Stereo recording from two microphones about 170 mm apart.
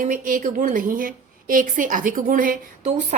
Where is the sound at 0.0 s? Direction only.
50° right (ahead or behind).